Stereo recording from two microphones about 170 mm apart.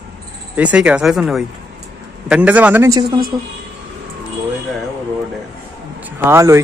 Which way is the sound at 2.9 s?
25° right (ahead or behind).